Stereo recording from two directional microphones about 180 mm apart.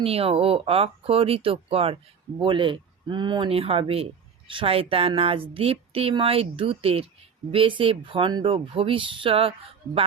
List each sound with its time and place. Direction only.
0.0 s speech: 35° right (ahead or behind)